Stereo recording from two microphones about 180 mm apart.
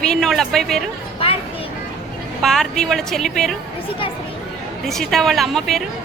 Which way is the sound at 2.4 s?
Centre (ahead or behind).